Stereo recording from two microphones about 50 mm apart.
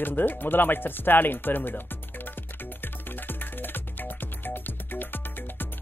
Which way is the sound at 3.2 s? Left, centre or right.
Left.